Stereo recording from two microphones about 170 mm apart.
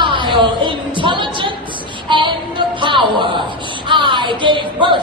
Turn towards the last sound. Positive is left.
turn(degrees=-30)  # may be behind; listen again after turning